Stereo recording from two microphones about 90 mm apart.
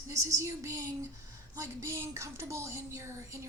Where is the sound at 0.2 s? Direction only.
35° right (ahead or behind).